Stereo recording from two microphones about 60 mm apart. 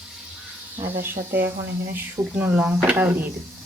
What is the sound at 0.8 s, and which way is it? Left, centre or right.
Speech, right.